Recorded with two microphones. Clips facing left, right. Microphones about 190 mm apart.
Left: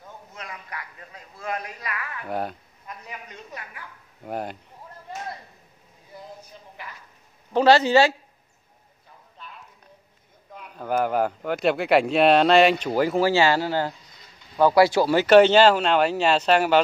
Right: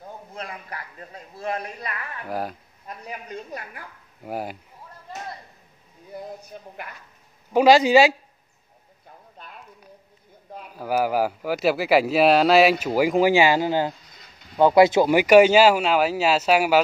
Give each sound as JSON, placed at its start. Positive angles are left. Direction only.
{"t": 0.0, "sound": "a man's voice", "side_deg": -35}
{"t": 2.2, "sound": "speech", "side_deg": 0}
{"t": 2.9, "sound": "a woman's voice", "side_deg": -35}
{"t": 4.2, "sound": "speech", "side_deg": -5}
{"t": 6.5, "sound": "a sound", "side_deg": -50}
{"t": 7.5, "sound": "speech", "side_deg": -10}
{"t": 10.7, "sound": "speech", "side_deg": -5}